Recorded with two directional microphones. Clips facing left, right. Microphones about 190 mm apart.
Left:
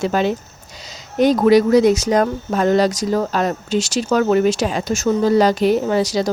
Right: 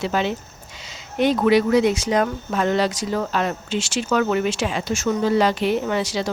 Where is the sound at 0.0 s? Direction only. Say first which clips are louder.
Left 4 dB; 45° left (ahead or behind).